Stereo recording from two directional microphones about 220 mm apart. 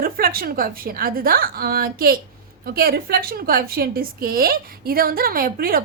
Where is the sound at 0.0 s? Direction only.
40° right (ahead or behind).